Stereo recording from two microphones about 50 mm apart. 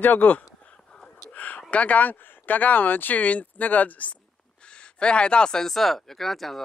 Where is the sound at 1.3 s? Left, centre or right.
Left.